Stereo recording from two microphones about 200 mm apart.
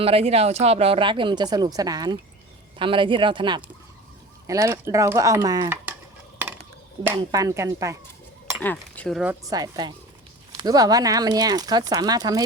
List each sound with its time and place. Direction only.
0.0 s speech: 30° right (ahead or behind); by 5.9 s 10° right (ahead or behind)
7.2 s speech: 20° right (ahead or behind)
8.6 s speech: 10° left (ahead or behind)
9.4 s speech: 20° right (ahead or behind)